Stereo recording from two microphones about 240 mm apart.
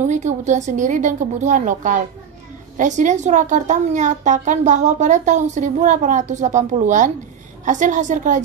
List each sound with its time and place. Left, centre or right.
0.0 s a woman's voice: right